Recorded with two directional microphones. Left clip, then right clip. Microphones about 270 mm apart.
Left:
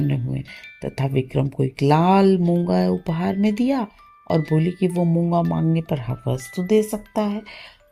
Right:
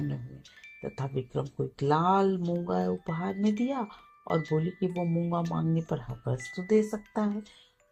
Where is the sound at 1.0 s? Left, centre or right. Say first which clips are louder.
Left 11 dB; left.